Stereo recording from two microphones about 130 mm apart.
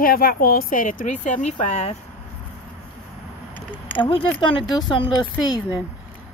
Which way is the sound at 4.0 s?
45° left (ahead or behind).